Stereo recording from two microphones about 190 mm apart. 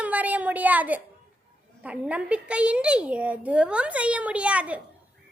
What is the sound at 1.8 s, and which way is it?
A child's voice, 5° right (ahead or behind).